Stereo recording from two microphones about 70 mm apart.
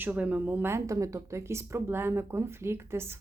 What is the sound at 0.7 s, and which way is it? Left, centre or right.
Speech, right.